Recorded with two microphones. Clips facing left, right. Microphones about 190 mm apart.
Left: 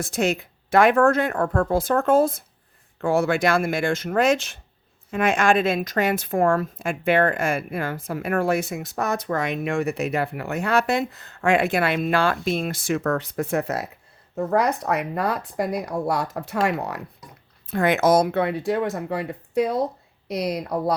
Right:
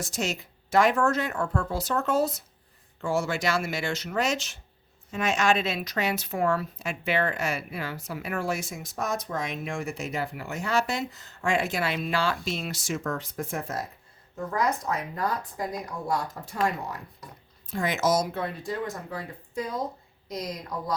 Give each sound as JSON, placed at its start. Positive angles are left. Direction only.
{"t": 0.0, "sound": "a woman's voice", "side_deg": 55}